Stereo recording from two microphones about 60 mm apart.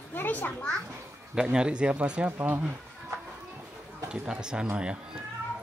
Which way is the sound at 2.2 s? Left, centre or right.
Right.